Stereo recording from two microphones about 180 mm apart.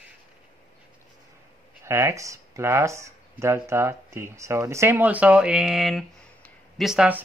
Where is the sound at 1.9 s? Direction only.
15° right (ahead or behind).